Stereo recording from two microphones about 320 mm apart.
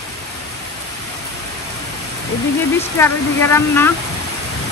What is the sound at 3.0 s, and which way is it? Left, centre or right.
Speech, centre.